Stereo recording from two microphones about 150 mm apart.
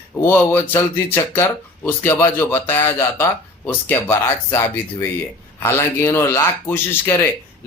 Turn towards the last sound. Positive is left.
turn(degrees=15)  # may be behind; listen again after turning